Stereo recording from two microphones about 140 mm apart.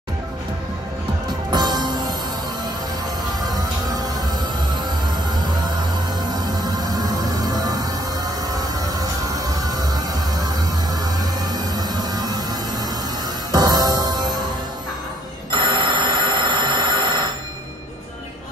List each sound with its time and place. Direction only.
1.5 s music: 30° right (ahead or behind)
6.1 s music: 30° right (ahead or behind)
15.5 s telephone bell ringing: 35° right (ahead or behind)